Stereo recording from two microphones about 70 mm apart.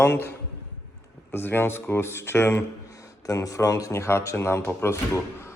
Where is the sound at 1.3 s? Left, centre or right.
Left.